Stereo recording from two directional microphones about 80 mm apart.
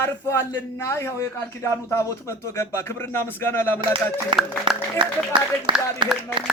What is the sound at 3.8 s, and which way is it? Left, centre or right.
Speech, right.